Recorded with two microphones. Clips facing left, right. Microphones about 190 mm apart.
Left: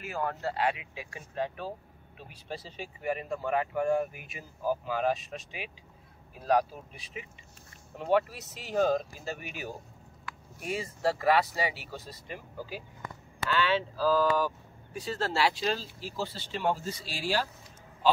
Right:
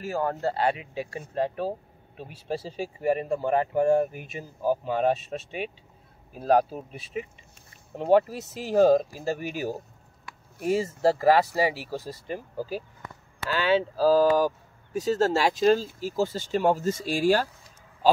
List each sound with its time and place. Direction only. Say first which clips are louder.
0.0 s speech: right 6 dB; 35° right (ahead or behind)